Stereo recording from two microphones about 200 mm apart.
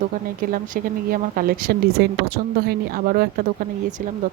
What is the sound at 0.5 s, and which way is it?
Speech, 45° right (ahead or behind).